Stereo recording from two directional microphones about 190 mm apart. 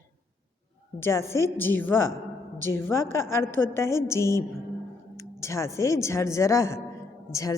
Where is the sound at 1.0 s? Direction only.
15° left (ahead or behind).